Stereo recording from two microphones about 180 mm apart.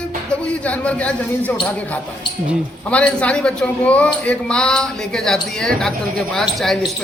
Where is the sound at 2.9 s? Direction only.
5° left (ahead or behind).